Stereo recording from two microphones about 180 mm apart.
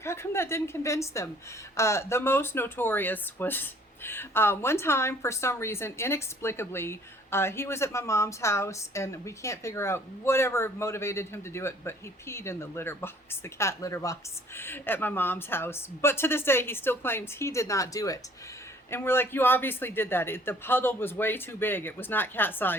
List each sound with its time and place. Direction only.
0.0 s speech: 15° left (ahead or behind)